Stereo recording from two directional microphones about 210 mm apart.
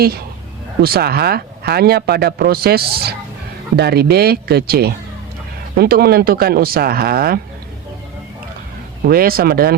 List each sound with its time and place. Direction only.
0.8 s a man's voice: 45° right (ahead or behind)
9.0 s a man's voice: 45° right (ahead or behind)